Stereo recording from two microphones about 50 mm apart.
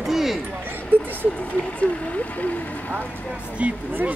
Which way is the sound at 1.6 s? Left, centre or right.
Left.